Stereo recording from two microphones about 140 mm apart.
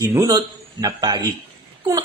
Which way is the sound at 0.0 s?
25° right (ahead or behind).